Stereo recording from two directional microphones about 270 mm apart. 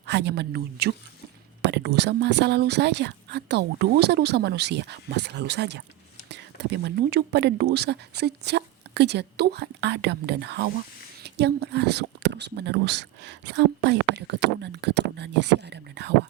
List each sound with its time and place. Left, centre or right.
0.0 s a woman's voice: right